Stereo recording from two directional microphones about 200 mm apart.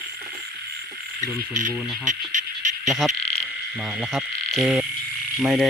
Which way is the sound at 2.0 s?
40° right (ahead or behind).